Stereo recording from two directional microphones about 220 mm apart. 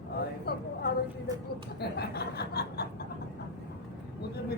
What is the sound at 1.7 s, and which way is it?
Speech, 45° left (ahead or behind).